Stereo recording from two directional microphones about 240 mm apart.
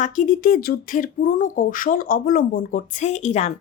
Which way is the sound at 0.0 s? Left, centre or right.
Left.